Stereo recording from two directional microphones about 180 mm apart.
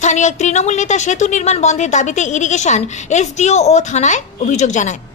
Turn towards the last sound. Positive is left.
turn(degrees=40)  # may be behind; listen again after turning